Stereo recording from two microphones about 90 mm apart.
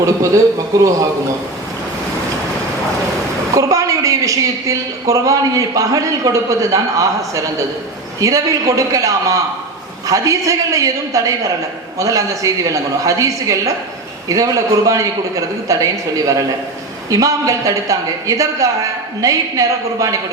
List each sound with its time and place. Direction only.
0.7 s a woman's voice: 40° right (ahead or behind)
3.5 s a woman's voice: 40° right (ahead or behind)
8.2 s a woman's voice: 40° right (ahead or behind)